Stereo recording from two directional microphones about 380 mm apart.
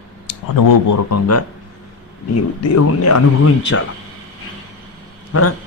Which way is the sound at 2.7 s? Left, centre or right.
Left.